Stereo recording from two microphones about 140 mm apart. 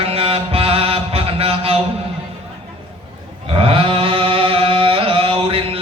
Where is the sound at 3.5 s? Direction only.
40° right (ahead or behind).